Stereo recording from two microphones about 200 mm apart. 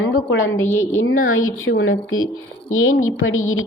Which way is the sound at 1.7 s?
55° left (ahead or behind).